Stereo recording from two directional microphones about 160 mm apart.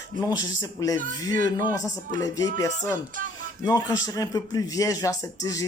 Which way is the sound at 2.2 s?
20° left (ahead or behind).